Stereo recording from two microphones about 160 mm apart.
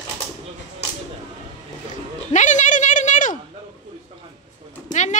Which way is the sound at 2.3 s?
50° left (ahead or behind).